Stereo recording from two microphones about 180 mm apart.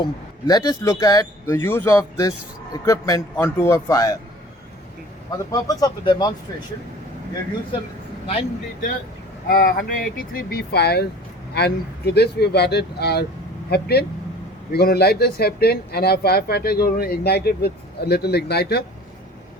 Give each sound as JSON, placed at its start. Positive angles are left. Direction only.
{"t": 0.0, "sound": "a man's voice", "side_deg": 20}
{"t": 5.5, "sound": "speech", "side_deg": 20}
{"t": 8.3, "sound": "speech", "side_deg": 35}
{"t": 9.5, "sound": "speech", "side_deg": 55}